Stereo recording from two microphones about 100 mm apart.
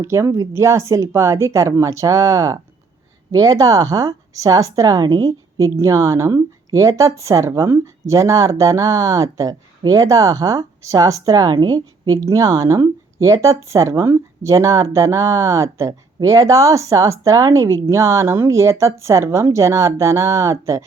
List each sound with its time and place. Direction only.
0.0 s speech: 30° right (ahead or behind)